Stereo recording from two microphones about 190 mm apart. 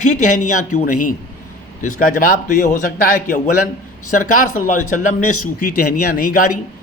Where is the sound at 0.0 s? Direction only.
40° left (ahead or behind).